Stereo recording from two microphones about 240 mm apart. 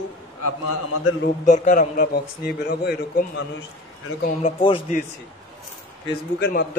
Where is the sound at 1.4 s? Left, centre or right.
Left.